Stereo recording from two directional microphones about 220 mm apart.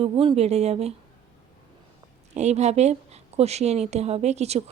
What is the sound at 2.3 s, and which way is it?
Speech, 30° right (ahead or behind).